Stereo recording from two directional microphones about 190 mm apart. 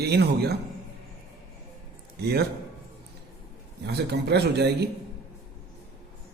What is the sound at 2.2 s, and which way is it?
Speech, 55° right (ahead or behind).